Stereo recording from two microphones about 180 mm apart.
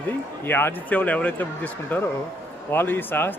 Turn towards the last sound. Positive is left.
turn(degrees=10)  # may be behind; listen again after turning